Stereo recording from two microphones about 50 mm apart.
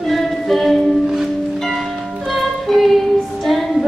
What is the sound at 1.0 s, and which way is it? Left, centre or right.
Music, centre.